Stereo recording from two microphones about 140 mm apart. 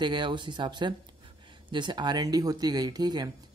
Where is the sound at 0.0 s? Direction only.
35° right (ahead or behind).